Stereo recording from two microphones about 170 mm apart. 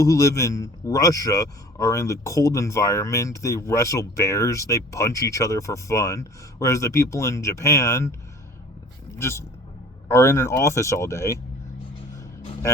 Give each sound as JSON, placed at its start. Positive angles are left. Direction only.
{"t": 0.0, "sound": "a man's voice", "side_deg": 20}
{"t": 9.1, "sound": "a man's voice", "side_deg": 15}